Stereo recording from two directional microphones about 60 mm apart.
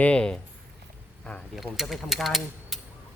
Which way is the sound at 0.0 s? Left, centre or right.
Centre.